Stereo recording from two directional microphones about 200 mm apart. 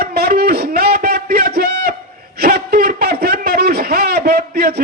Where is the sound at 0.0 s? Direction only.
50° right (ahead or behind).